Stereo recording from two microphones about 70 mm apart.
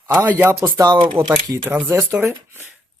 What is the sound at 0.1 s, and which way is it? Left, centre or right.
Speech, right.